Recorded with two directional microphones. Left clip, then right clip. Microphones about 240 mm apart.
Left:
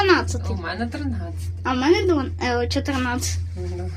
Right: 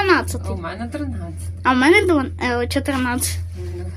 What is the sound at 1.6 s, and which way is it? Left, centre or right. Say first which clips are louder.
A woman's voice: right 5 dB; centre.